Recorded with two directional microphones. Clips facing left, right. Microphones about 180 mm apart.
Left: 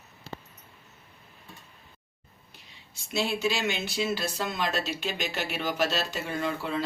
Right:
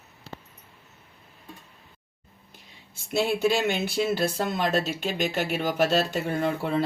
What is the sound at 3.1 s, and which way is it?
Speech, 55° right (ahead or behind).